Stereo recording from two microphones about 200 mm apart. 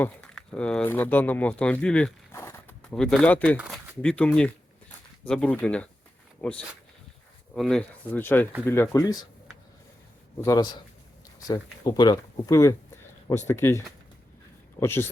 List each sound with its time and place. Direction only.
0.0 s speech: 5° left (ahead or behind)
2.9 s speech: 5° left (ahead or behind)
10.4 s speech: 15° left (ahead or behind)